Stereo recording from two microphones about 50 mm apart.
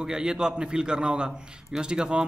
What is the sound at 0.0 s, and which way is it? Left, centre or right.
A man's voice, centre.